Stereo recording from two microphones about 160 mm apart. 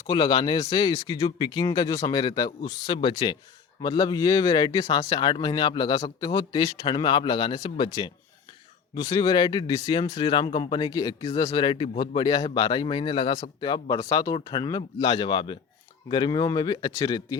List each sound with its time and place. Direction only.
0.1 s a man's voice: 30° left (ahead or behind)